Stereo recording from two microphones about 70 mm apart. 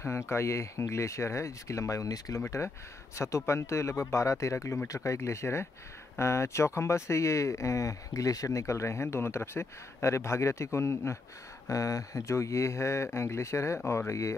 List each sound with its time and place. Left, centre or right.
0.0 s speech: left
2.3 s speech: left
11.7 s speech: left